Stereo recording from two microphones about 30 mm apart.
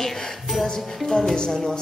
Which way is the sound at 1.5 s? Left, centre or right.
Left.